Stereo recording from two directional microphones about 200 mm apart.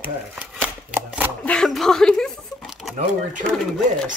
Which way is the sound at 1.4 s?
5° left (ahead or behind).